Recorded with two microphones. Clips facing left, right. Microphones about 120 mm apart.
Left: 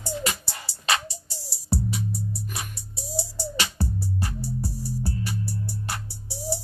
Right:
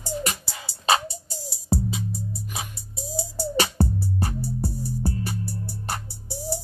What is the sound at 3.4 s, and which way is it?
Music, 50° right (ahead or behind).